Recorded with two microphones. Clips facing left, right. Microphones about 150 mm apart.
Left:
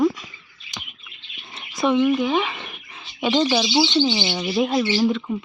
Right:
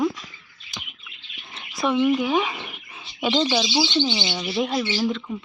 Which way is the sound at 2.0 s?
10° right (ahead or behind).